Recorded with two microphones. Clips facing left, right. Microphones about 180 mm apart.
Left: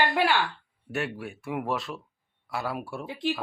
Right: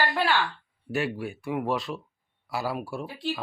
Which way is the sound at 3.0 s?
20° left (ahead or behind).